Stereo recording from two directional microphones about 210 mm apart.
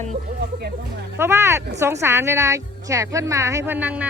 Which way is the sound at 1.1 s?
10° right (ahead or behind).